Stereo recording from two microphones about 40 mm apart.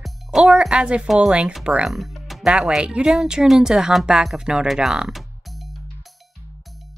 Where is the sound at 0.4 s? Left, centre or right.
Right.